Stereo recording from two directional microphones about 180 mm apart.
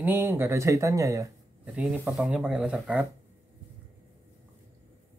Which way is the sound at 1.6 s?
5° right (ahead or behind).